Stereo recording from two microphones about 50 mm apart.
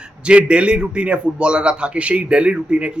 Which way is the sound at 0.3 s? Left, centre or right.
Right.